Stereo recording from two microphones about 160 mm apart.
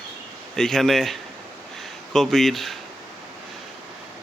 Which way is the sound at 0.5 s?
5° left (ahead or behind).